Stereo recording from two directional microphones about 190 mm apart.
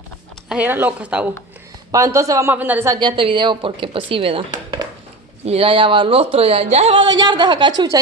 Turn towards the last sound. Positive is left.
turn(degrees=-20)  # may be behind; listen again after turning